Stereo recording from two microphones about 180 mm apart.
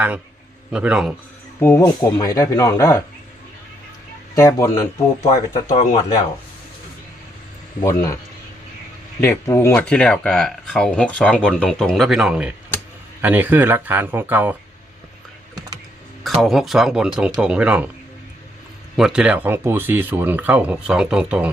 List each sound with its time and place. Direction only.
0.7 s speech: 5° right (ahead or behind)
1.5 s speech: 15° left (ahead or behind)
4.4 s speech: 15° left (ahead or behind)
7.8 s speech: 20° left (ahead or behind)
9.2 s speech: 15° left (ahead or behind); by 14.5 s 10° right (ahead or behind)
16.2 s speech: centre (ahead or behind)
18.9 s speech: 5° right (ahead or behind)